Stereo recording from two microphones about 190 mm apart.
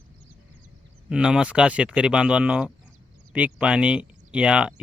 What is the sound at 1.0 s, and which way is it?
Speech, 5° right (ahead or behind).